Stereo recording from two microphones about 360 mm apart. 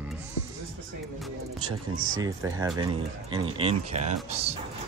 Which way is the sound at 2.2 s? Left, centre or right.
Centre.